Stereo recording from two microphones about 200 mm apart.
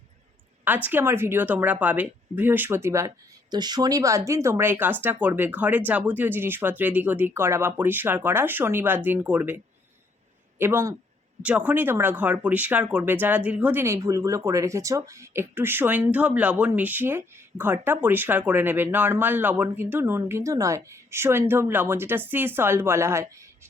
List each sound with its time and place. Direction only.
0.6 s speech: 10° right (ahead or behind)
10.6 s speech: 15° right (ahead or behind)